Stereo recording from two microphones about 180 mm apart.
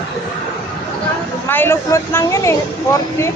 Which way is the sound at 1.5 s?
10° left (ahead or behind).